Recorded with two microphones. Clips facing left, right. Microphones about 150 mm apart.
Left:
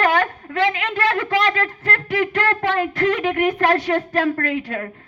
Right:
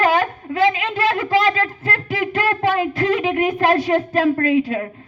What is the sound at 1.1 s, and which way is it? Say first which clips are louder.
Speech: right 2 dB; 25° right (ahead or behind).